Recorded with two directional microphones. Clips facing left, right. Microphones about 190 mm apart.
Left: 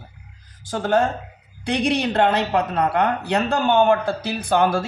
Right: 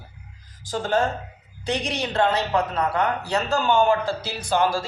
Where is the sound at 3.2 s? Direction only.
60° left (ahead or behind).